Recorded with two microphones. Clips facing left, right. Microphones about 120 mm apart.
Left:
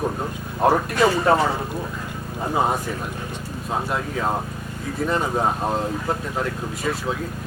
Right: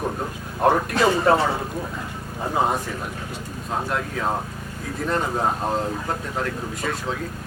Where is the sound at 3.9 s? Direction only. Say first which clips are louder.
Even; 5° left (ahead or behind).